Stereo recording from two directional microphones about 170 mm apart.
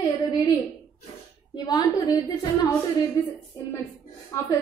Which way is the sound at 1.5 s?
20° left (ahead or behind).